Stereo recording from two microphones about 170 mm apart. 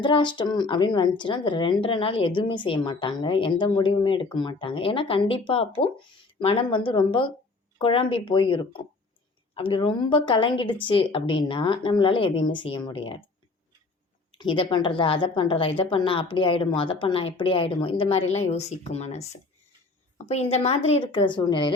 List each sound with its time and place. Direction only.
0.0 s speech: 30° left (ahead or behind)
14.3 s a woman's voice: 30° left (ahead or behind)
20.2 s a woman's voice: 40° left (ahead or behind)